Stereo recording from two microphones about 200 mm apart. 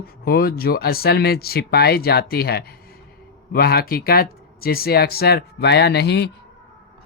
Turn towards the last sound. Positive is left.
turn(degrees=55)  # may be behind; listen again after turning